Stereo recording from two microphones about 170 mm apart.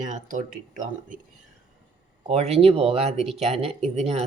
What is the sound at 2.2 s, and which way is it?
Speech, 40° right (ahead or behind).